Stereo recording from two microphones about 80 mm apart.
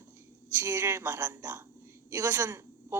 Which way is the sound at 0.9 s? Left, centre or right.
Right.